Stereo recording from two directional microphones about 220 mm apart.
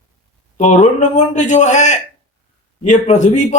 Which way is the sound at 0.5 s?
35° left (ahead or behind).